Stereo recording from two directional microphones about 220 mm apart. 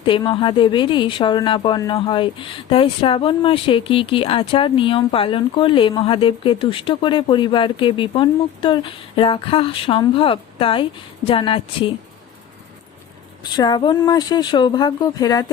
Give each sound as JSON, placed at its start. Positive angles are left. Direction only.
{"t": 0.0, "sound": "speech", "side_deg": 20}
{"t": 13.4, "sound": "speech", "side_deg": 20}